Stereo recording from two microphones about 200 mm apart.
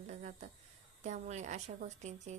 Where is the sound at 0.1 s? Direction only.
35° right (ahead or behind).